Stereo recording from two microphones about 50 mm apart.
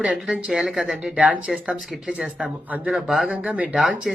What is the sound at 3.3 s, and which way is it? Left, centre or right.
Speech, right.